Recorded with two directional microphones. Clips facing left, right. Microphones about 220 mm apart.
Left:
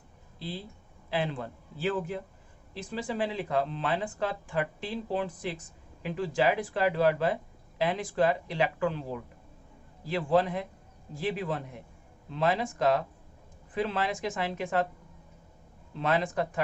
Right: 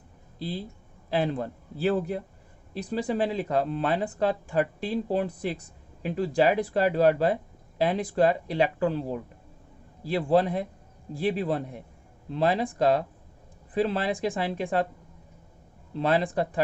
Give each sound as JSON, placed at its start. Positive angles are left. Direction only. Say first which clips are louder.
{"t": 1.1, "sound": "speech", "louder": "right 5 dB", "side_deg": -40}
{"t": 16.0, "sound": "speech", "louder": "right 4 dB", "side_deg": -35}